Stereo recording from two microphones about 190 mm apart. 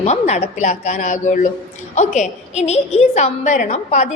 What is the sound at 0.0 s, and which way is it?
A woman's voice, 35° left (ahead or behind).